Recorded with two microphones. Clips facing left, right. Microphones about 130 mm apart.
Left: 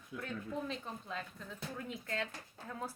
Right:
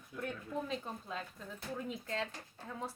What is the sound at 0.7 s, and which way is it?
Speech, 5° right (ahead or behind).